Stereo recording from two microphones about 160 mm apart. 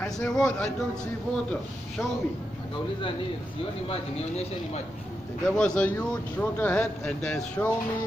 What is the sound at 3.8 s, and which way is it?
Speech, 40° left (ahead or behind).